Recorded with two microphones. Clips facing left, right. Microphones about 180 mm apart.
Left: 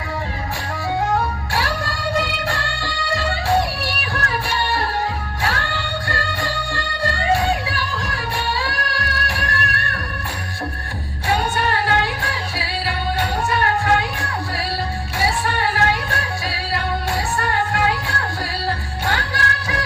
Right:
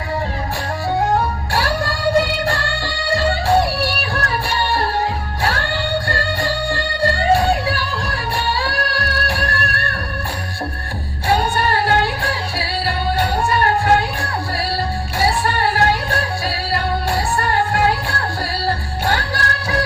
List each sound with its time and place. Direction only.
0.9 s music: 35° right (ahead or behind)
5.4 s music: 35° right (ahead or behind)
11.3 s music: 35° right (ahead or behind)